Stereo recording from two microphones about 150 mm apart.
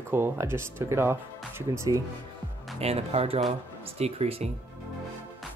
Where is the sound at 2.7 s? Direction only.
40° right (ahead or behind).